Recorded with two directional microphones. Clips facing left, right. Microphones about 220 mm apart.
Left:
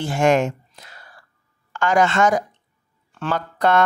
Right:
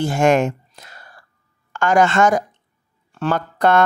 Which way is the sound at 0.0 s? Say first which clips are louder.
Right 2 dB; 45° right (ahead or behind).